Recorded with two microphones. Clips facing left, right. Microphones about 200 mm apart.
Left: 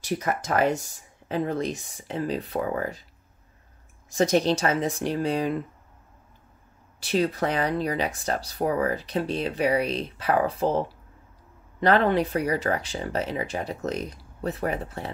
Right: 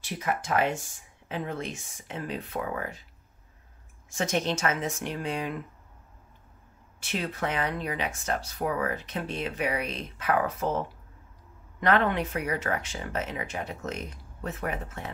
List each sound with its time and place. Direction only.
0.0 s speech: 40° left (ahead or behind)
4.1 s speech: 35° left (ahead or behind)
7.0 s speech: 35° left (ahead or behind)